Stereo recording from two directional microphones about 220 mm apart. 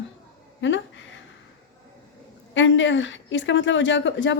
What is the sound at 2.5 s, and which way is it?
A woman's voice, 55° left (ahead or behind).